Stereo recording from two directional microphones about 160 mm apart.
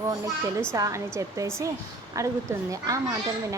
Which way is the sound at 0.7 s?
20° right (ahead or behind).